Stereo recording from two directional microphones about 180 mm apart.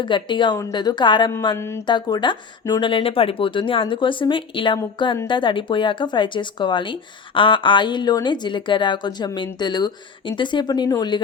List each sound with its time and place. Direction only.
0.0 s speech: 25° left (ahead or behind)
1.3 s a sound: 20° left (ahead or behind)
1.9 s speech: 25° left (ahead or behind)